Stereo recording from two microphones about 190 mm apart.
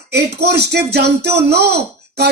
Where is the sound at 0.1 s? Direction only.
60° right (ahead or behind).